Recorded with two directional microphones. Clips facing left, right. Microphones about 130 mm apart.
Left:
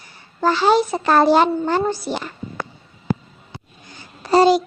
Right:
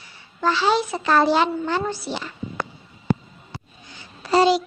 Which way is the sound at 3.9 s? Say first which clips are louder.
Left 3 dB; 40° left (ahead or behind).